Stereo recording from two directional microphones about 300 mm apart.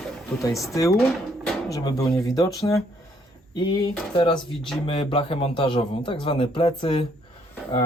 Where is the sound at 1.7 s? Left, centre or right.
Centre.